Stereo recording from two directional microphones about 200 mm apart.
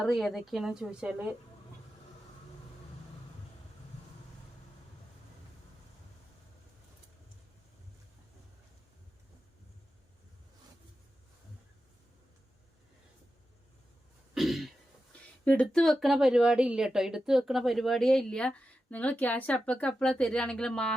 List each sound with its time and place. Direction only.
0.0 s speech: centre (ahead or behind)
14.3 s throat clearing: centre (ahead or behind)
15.4 s speech: 5° left (ahead or behind)